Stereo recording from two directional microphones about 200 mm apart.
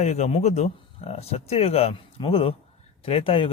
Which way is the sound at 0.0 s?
35° left (ahead or behind).